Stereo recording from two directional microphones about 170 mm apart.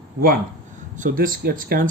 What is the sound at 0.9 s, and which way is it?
Speech, 50° right (ahead or behind).